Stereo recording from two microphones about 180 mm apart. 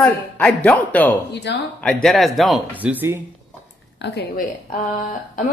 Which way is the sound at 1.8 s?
5° left (ahead or behind).